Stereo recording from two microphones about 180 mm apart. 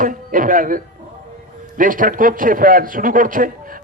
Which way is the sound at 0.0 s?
50° right (ahead or behind).